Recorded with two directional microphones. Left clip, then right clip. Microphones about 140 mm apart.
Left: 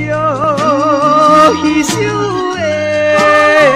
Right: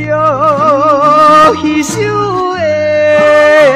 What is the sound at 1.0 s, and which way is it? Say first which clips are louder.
Music: right 2 dB; 45° left (ahead or behind).